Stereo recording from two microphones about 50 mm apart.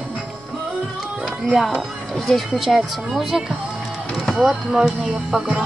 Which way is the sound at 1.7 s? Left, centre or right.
Centre.